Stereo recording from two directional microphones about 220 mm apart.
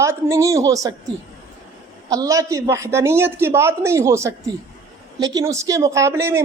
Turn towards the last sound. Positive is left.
turn(degrees=-10)  # may be behind; listen again after turning